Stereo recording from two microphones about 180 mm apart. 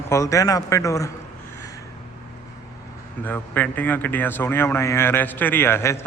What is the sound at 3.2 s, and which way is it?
A man's voice, 10° left (ahead or behind).